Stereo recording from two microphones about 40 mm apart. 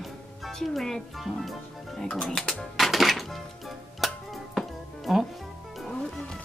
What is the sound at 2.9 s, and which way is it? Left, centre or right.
Music, centre.